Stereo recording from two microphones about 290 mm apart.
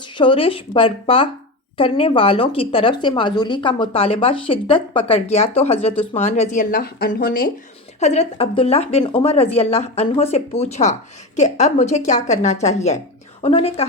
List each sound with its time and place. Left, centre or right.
0.0 s speech: centre